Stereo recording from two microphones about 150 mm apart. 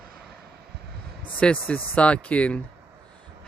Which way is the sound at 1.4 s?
10° left (ahead or behind).